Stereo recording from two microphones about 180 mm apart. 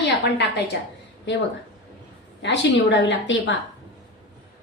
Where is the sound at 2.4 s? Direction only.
75° left (ahead or behind).